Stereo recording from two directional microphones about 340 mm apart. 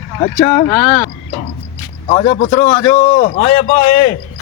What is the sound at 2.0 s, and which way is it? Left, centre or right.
A man's voice, centre.